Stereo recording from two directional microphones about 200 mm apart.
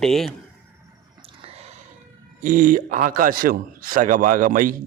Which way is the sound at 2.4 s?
45° right (ahead or behind).